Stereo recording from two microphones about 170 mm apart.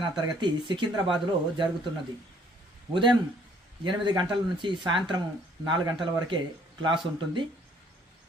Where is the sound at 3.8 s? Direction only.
25° right (ahead or behind).